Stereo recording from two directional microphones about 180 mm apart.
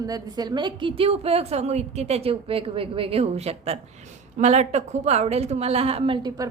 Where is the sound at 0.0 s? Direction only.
20° right (ahead or behind).